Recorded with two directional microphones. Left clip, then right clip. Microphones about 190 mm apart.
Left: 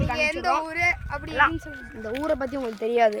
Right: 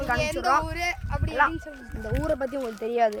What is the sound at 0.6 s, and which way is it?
Speech, 20° left (ahead or behind).